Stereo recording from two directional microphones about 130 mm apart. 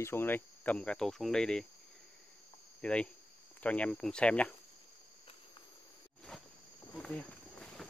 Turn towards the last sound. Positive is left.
turn(degrees=5)  # may be behind; listen again after turning